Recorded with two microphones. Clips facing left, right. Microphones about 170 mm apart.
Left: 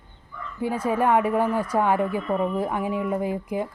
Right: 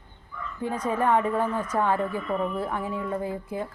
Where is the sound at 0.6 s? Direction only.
10° left (ahead or behind).